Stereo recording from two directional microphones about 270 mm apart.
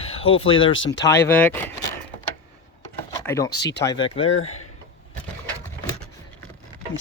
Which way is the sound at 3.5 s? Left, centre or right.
Left.